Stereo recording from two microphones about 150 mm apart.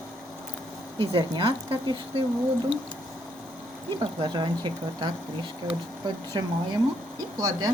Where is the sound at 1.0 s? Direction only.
35° right (ahead or behind).